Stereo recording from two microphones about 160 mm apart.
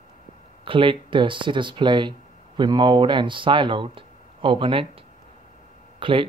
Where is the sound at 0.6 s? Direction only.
30° right (ahead or behind).